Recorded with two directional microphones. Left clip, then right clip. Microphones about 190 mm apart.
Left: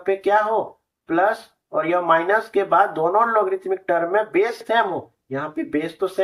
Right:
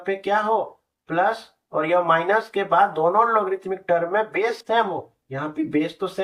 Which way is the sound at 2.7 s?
25° left (ahead or behind).